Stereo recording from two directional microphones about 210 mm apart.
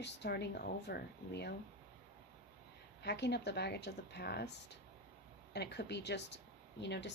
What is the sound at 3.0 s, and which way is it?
Speech, 55° left (ahead or behind).